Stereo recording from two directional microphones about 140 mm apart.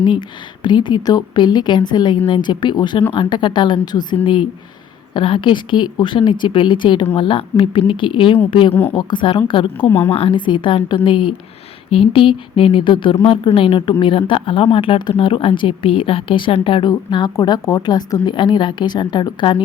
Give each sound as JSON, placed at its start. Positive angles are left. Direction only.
{"t": 0.0, "sound": "speech", "side_deg": 35}
{"t": 8.7, "sound": "a woman's voice", "side_deg": 15}
{"t": 9.0, "sound": "speech", "side_deg": 35}